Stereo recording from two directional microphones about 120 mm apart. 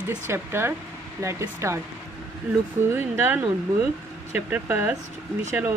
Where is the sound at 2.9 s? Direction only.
15° right (ahead or behind).